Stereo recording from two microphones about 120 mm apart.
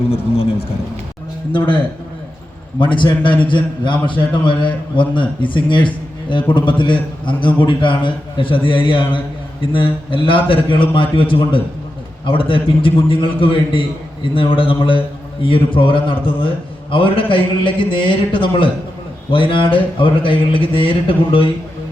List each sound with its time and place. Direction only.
1.5 s a man's voice: 40° left (ahead or behind)